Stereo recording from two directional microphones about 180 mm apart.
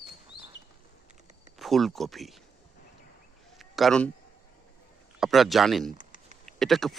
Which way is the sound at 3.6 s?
Centre (ahead or behind).